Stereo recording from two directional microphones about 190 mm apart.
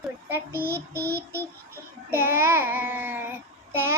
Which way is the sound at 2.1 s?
10° right (ahead or behind).